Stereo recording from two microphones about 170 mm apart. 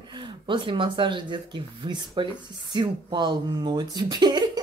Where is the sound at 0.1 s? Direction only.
30° right (ahead or behind).